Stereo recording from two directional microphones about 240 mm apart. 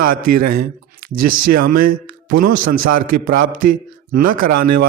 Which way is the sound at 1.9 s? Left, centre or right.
Right.